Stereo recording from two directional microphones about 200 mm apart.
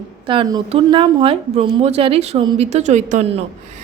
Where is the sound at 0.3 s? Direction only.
20° right (ahead or behind).